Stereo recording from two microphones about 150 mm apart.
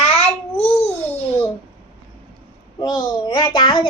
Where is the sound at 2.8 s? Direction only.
25° left (ahead or behind).